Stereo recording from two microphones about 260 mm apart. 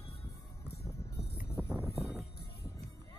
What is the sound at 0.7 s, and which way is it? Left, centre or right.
Music, left.